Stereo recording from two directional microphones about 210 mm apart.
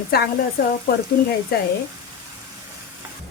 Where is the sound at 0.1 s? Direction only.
50° left (ahead or behind).